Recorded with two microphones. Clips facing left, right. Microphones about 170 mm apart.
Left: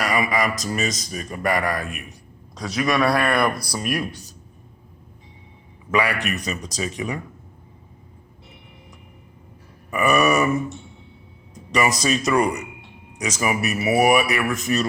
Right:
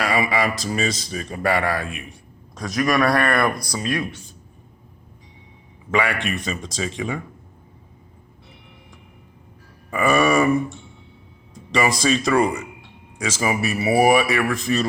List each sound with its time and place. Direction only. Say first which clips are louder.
0.0 s speech: right 1 dB; 30° right (ahead or behind)
2.6 s a man's voice: right 1 dB; 5° left (ahead or behind)
6.1 s speech: even; 25° right (ahead or behind)
9.9 s speech: right 1 dB; 30° right (ahead or behind)
11.7 s speech: right 1 dB; 30° right (ahead or behind)